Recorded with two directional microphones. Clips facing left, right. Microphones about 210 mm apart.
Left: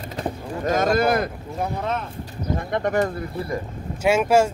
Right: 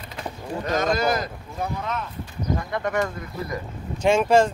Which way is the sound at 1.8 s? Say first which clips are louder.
Left 3 dB; 30° left (ahead or behind).